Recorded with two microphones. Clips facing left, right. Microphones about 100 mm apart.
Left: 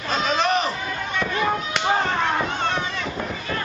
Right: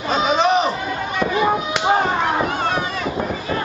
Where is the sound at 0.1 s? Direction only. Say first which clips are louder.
Right 5 dB; 5° right (ahead or behind).